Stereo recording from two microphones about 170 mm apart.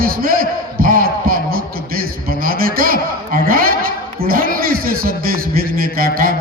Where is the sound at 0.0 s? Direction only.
55° right (ahead or behind).